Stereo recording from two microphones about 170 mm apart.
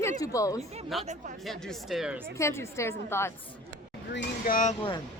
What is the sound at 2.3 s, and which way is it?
A woman's voice, 15° left (ahead or behind).